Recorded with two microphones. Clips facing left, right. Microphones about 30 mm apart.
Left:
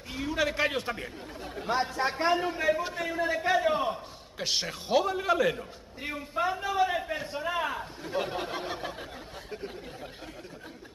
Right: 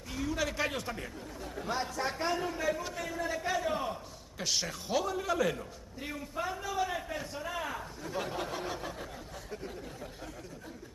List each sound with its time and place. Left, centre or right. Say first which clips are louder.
0.1 s speech: left 4 dB; left